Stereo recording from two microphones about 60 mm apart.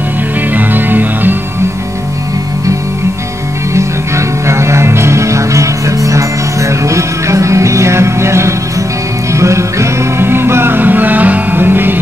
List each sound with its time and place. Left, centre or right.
0.6 s music: right
4.5 s music: right